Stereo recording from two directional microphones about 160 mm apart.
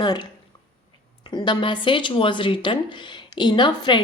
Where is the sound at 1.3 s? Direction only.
30° left (ahead or behind).